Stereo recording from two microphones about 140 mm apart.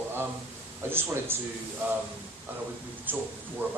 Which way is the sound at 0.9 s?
15° right (ahead or behind).